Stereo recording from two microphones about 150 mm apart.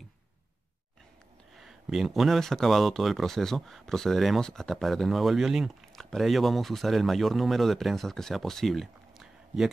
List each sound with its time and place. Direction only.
1.6 s speech: centre (ahead or behind)